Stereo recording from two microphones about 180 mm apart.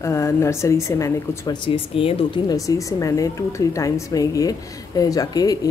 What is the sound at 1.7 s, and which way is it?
Speech, 30° left (ahead or behind).